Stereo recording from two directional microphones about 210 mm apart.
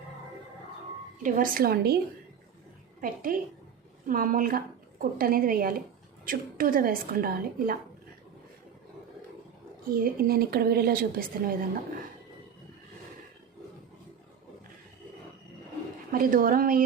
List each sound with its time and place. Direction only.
1.2 s a woman's voice: 40° right (ahead or behind)
3.0 s a woman's voice: 40° right (ahead or behind)
9.9 s a woman's voice: 45° right (ahead or behind)
16.1 s a woman's voice: 40° right (ahead or behind)